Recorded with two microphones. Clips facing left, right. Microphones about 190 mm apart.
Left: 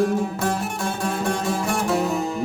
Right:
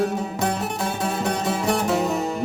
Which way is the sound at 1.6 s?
20° right (ahead or behind).